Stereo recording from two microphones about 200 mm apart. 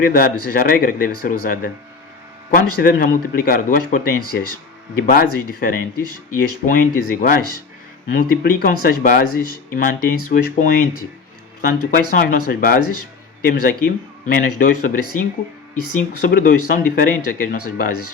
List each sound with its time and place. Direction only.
0.0 s speech: 45° left (ahead or behind)